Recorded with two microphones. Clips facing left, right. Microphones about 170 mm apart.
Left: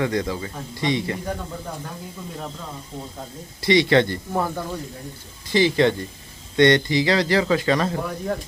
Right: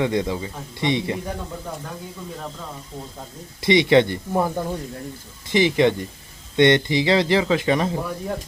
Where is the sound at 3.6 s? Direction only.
20° right (ahead or behind).